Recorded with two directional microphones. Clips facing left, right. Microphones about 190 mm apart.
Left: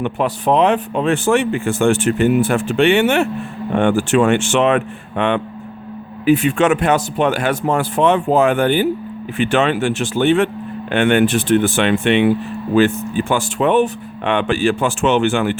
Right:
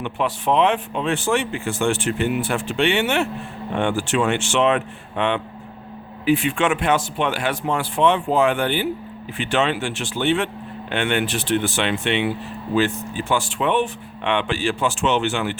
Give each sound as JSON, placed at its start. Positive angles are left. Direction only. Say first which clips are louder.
{"t": 0.0, "sound": "speech", "louder": "left 5 dB", "side_deg": 40}